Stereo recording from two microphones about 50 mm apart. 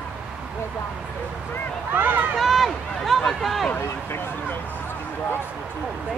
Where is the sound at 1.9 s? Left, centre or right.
Right.